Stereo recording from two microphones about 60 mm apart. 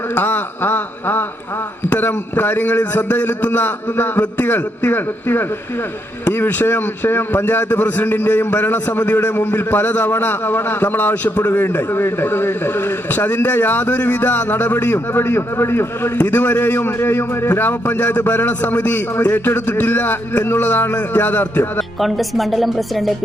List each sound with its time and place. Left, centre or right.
0.1 s a man's voice: left
16.1 s a man's voice: left
21.8 s speech: centre